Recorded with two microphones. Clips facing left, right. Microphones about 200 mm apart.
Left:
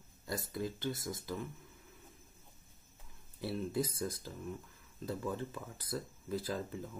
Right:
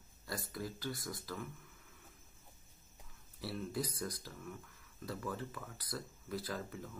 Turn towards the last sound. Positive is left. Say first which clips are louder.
# left 4 dB
turn(degrees=25)  # may be behind; listen again after turning